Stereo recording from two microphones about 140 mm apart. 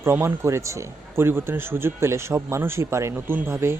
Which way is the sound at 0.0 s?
15° right (ahead or behind).